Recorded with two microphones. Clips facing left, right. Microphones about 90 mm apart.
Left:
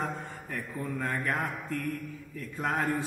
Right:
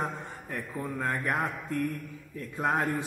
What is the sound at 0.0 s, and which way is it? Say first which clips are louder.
A man's voice: even; 20° right (ahead or behind).